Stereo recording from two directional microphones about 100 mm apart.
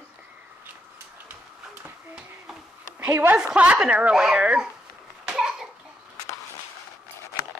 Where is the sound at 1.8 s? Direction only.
10° right (ahead or behind).